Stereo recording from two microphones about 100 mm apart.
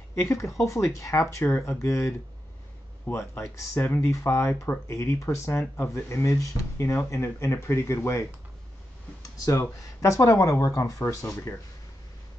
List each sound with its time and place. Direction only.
0.1 s speech: 30° left (ahead or behind)